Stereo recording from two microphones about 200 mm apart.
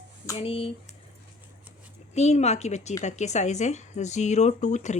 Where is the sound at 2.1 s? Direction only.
35° left (ahead or behind).